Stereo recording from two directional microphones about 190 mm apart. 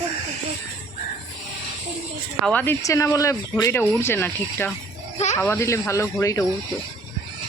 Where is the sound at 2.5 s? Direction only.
10° left (ahead or behind).